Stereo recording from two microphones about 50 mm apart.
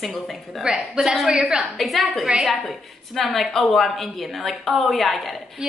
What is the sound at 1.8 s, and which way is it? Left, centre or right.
A woman's voice, centre.